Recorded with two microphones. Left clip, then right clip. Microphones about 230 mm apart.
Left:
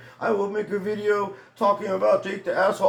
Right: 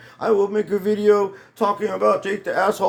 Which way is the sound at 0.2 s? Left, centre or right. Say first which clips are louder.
Right 5 dB; right.